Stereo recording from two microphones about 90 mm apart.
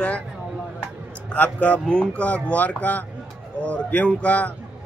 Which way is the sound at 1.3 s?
15° left (ahead or behind).